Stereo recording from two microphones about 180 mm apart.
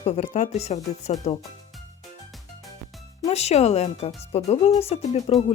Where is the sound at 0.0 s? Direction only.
40° left (ahead or behind).